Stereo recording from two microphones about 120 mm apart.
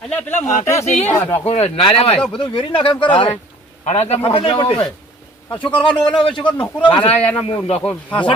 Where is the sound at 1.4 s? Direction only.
60° left (ahead or behind).